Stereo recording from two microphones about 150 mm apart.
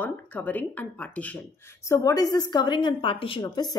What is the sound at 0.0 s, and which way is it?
Speech, 10° left (ahead or behind).